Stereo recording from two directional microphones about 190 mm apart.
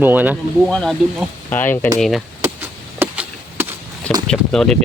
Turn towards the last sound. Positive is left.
turn(degrees=5)  # may be behind; listen again after turning